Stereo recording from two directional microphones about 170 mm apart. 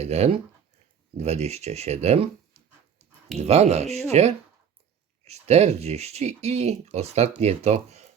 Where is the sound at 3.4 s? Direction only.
40° right (ahead or behind).